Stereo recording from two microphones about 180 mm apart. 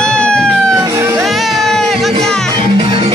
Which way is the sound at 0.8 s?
15° right (ahead or behind).